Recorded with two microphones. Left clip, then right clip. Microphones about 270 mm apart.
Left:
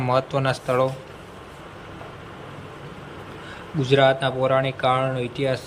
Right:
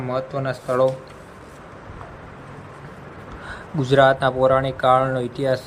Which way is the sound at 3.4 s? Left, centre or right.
Centre.